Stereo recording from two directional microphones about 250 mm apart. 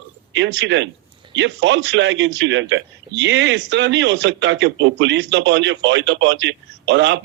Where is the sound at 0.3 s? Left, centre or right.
Right.